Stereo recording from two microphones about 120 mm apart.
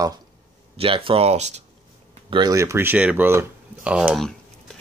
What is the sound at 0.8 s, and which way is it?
Speech, 50° right (ahead or behind).